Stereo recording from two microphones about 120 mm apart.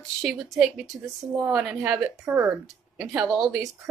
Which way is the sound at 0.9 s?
10° right (ahead or behind).